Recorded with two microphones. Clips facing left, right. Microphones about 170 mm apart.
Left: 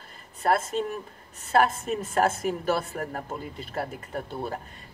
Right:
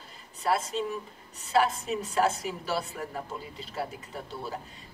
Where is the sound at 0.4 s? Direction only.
50° left (ahead or behind).